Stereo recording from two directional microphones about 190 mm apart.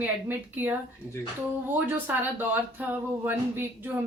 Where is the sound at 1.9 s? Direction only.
10° right (ahead or behind).